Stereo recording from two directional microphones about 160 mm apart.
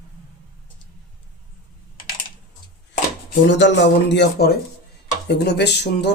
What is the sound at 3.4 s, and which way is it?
Speech, 90° left.